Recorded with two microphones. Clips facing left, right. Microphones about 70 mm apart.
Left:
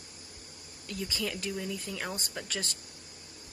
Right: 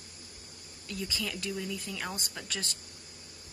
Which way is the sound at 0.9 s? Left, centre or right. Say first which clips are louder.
Left 1 dB; left.